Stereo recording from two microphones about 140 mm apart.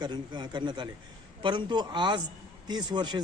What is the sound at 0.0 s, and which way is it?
Speech, 30° right (ahead or behind).